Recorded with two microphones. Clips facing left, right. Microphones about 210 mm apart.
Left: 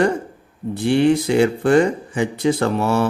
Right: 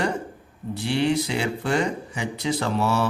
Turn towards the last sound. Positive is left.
turn(degrees=50)  # may be behind; listen again after turning